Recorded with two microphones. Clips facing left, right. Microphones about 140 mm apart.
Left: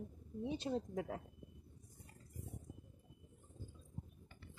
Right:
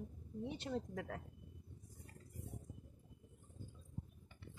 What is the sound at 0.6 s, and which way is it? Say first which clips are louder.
Speech: left 3 dB; 20° left (ahead or behind).